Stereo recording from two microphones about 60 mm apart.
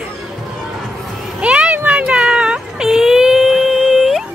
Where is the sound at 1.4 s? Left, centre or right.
Centre.